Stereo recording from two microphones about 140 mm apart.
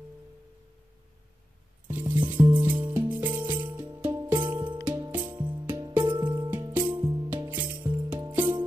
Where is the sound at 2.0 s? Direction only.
35° right (ahead or behind).